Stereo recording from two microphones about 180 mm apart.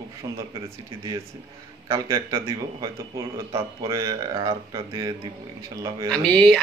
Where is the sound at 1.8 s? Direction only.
20° right (ahead or behind).